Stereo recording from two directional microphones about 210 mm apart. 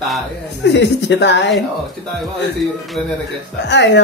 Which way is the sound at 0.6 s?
55° left (ahead or behind).